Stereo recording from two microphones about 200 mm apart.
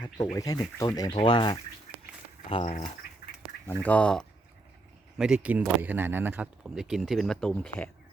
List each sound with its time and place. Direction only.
0.3 s speech: 20° left (ahead or behind)
3.7 s speech: 5° left (ahead or behind)